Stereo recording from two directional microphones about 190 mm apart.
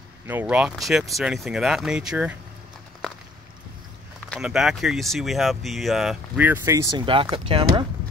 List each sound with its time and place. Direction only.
0.3 s speech: 10° right (ahead or behind)
4.3 s speech: 5° right (ahead or behind)
7.1 s speech: 25° right (ahead or behind)